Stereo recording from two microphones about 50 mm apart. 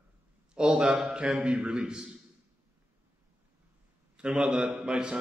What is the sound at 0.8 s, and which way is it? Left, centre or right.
A man's voice, centre.